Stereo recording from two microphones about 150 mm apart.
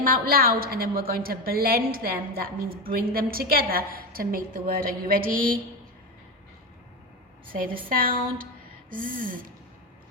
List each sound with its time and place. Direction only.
0.0 s a woman's voice: 75° right (ahead or behind)
7.4 s a woman's voice: 70° right (ahead or behind)